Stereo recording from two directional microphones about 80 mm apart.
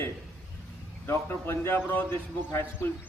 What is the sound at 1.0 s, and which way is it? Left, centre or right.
Speech, left.